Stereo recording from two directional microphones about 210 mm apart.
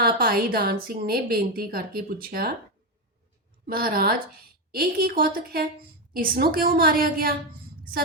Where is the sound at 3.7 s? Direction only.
45° right (ahead or behind).